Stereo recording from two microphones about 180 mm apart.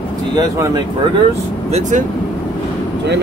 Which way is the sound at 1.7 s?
40° right (ahead or behind).